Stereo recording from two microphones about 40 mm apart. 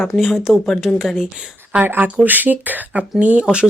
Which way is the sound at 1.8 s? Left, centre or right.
Right.